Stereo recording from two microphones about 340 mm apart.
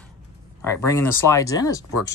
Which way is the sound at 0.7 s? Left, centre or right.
Centre.